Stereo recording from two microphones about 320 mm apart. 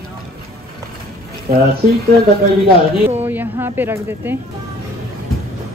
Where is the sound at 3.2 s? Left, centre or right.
Centre.